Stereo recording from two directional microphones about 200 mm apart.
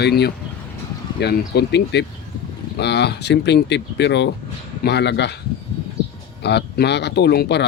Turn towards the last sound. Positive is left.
turn(degrees=55)  # may be behind; listen again after turning